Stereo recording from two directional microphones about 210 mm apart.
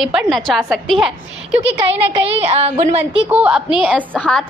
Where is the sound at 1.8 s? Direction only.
25° right (ahead or behind).